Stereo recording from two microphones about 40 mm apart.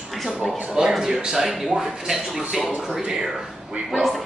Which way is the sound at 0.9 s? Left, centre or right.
Centre.